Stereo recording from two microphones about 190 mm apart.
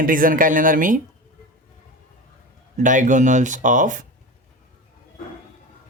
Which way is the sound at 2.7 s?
40° right (ahead or behind).